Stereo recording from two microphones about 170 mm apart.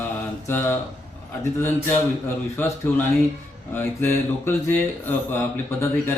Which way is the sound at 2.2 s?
15° left (ahead or behind).